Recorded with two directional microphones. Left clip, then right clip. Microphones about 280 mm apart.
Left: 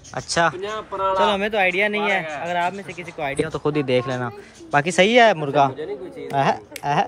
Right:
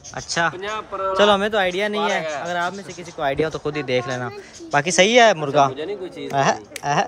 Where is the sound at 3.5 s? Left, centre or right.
Centre.